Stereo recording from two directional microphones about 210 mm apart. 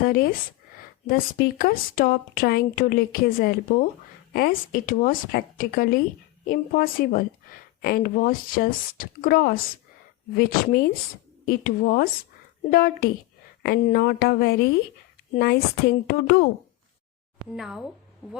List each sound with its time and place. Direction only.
0.0 s a woman's voice: 45° left (ahead or behind)
17.6 s speech: centre (ahead or behind)